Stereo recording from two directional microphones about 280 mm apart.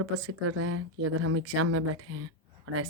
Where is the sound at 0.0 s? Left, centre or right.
Right.